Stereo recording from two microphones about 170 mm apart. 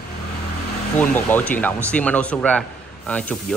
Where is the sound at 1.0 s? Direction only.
10° left (ahead or behind).